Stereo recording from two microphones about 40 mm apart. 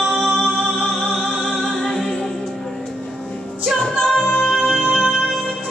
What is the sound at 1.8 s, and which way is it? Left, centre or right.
Music, centre.